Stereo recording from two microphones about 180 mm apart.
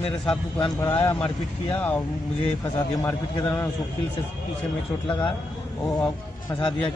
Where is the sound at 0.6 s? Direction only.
20° left (ahead or behind).